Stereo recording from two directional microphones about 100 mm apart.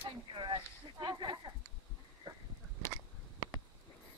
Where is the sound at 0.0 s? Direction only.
50° right (ahead or behind).